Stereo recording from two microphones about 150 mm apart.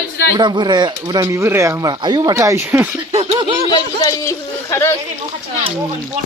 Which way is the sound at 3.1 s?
45° right (ahead or behind).